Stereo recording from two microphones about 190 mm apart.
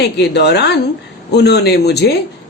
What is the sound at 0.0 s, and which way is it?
Speech, 60° left (ahead or behind).